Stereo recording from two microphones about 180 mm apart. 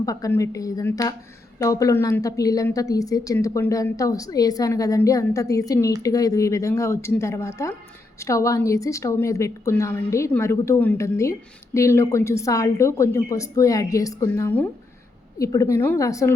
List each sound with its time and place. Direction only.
0.0 s a woman's voice: 20° left (ahead or behind)